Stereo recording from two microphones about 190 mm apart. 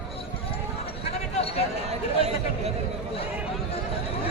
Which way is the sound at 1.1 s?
35° left (ahead or behind).